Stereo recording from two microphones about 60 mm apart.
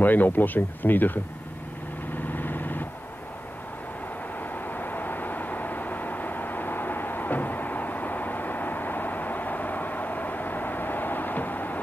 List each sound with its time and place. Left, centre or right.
0.0 s speech: left
2.2 s vehicle: left
4.4 s vehicle: left